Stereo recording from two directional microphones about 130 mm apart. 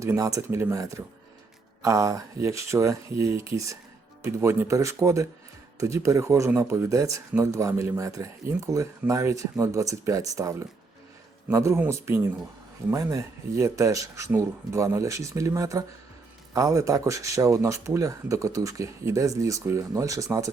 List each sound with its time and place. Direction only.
0.0 s speech: 25° right (ahead or behind)